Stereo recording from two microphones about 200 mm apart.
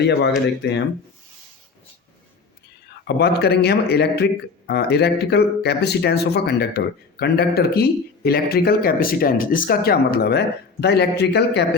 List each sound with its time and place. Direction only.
0.0 s speech: 55° left (ahead or behind)
3.2 s a man's voice: 55° left (ahead or behind)